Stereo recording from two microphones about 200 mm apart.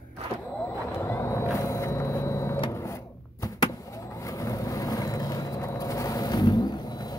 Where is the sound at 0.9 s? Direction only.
15° left (ahead or behind).